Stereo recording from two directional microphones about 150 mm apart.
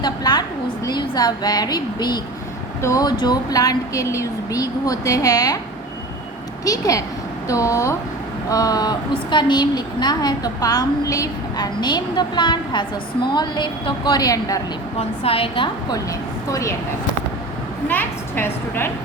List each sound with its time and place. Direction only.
0.0 s a woman's voice: 25° left (ahead or behind)
6.7 s a woman's voice: 20° left (ahead or behind)
14.9 s a woman's voice: 40° left (ahead or behind)
16.5 s a woman's voice: 20° left (ahead or behind)
17.8 s a woman's voice: 15° left (ahead or behind)